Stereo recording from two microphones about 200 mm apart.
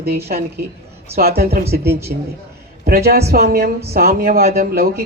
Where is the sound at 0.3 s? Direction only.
45° right (ahead or behind).